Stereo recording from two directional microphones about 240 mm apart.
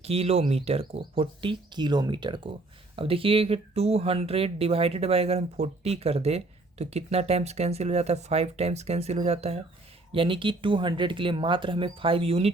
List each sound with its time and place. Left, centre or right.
0.0 s speech: right